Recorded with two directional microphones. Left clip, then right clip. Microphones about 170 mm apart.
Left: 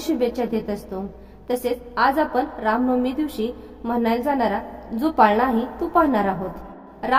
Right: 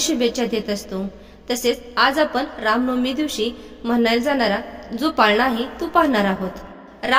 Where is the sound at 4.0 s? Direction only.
15° right (ahead or behind).